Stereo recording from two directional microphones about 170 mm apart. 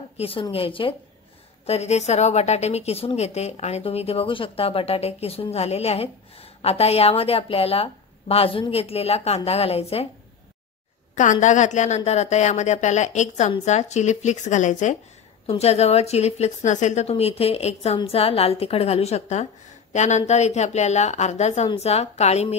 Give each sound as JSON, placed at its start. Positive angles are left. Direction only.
{"t": 0.2, "sound": "a woman's voice", "side_deg": 35}
{"t": 11.1, "sound": "a woman's voice", "side_deg": 45}